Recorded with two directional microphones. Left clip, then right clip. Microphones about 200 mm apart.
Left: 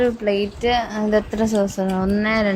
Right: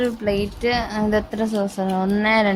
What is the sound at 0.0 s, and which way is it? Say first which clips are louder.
A woman's voice: left 3 dB; 5° right (ahead or behind).